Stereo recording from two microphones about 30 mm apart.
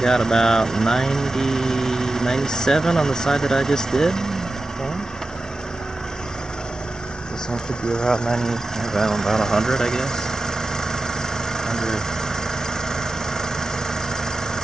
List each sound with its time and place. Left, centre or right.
0.0 s speech: centre
7.9 s speech: left
11.6 s vehicle: centre
12.4 s engine: centre